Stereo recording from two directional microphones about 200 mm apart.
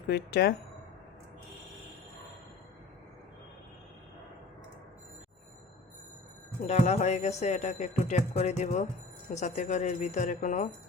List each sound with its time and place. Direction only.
0.1 s speech: 55° left (ahead or behind)
6.7 s speech: 35° left (ahead or behind)